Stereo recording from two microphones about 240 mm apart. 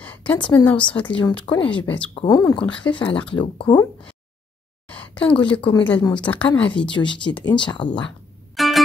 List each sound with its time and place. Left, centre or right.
0.0 s a sound: centre
0.4 s speech: left
0.9 s speech: centre
1.4 s speech: centre
1.8 s speech: centre
2.6 s speech: centre
3.3 s speech: centre
4.8 s a sound: centre
5.6 s speech: centre
5.9 s speech: centre
6.9 s speech: centre
8.5 s music: centre